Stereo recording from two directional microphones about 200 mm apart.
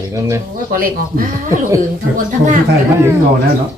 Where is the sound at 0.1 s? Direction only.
15° right (ahead or behind).